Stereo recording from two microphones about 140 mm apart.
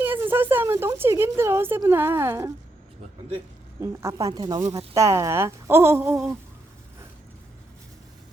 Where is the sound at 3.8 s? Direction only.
20° right (ahead or behind).